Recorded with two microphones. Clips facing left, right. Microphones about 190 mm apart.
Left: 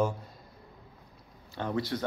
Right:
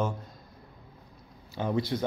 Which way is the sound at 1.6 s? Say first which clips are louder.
Right 3 dB; 15° right (ahead or behind).